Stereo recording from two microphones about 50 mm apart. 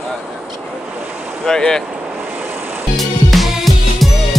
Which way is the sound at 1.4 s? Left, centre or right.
Centre.